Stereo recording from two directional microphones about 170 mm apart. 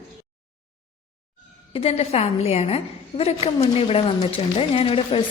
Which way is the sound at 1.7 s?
35° left (ahead or behind).